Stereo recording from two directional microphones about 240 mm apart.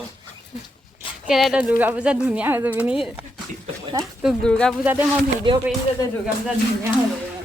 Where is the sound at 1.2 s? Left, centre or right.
Centre.